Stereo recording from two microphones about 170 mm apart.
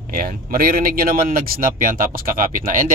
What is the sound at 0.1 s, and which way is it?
Speech, 60° right (ahead or behind).